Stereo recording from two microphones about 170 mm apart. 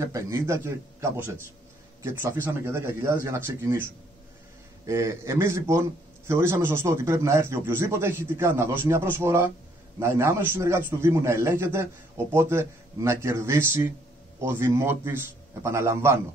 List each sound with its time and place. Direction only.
0.0 s a man's voice: 15° right (ahead or behind)